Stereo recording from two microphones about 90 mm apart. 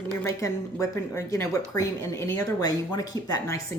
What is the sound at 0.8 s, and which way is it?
Speech, 35° left (ahead or behind).